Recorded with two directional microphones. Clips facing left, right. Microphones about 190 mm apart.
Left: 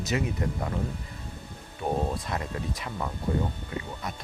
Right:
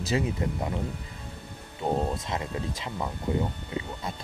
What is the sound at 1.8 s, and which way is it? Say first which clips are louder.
Speech: right 1 dB; 25° right (ahead or behind).